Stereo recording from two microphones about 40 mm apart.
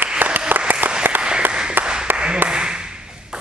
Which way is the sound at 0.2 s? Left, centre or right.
Right.